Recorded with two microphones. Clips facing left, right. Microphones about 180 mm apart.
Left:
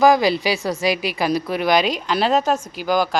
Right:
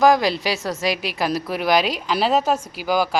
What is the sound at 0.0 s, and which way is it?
Speech, centre (ahead or behind).